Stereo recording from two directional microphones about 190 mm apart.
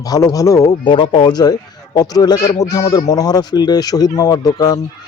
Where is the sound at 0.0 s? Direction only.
20° left (ahead or behind).